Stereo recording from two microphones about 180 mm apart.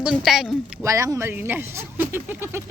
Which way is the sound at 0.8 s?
15° right (ahead or behind).